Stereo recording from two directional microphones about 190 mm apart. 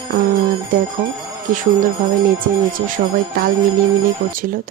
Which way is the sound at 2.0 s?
45° right (ahead or behind).